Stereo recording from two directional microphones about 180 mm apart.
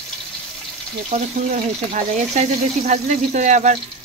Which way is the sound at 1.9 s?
40° right (ahead or behind).